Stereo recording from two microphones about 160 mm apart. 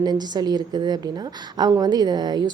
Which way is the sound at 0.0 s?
25° right (ahead or behind).